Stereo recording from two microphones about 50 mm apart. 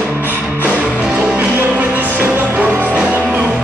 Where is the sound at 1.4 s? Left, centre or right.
Right.